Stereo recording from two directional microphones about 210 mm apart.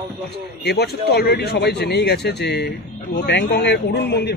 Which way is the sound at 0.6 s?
50° left (ahead or behind).